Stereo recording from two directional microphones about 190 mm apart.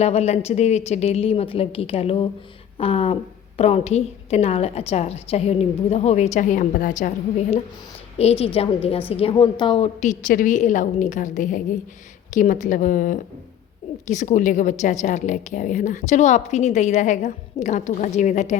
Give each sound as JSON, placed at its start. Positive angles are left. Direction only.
{"t": 0.0, "sound": "a woman's voice", "side_deg": 35}